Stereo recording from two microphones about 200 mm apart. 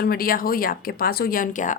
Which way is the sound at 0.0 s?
45° left (ahead or behind).